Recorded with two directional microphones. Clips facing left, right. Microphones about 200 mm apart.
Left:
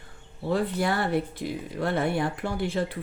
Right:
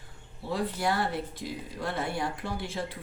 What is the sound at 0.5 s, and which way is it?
Speech, 60° left (ahead or behind).